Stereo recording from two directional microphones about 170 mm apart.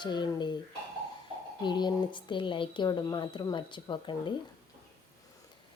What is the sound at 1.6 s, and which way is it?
Speech, 25° left (ahead or behind).